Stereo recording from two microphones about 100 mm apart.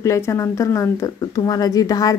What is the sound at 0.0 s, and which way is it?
Speech, 30° left (ahead or behind).